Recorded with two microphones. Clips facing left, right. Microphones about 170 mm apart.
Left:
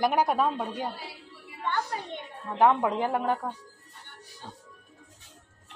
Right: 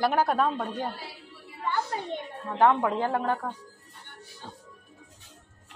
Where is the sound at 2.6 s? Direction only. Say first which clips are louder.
Even; 10° left (ahead or behind).